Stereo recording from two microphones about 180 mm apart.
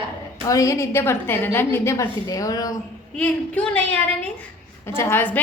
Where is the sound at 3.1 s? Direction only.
10° left (ahead or behind).